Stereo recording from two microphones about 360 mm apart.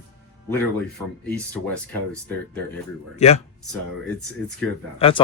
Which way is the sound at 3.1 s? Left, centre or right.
Centre.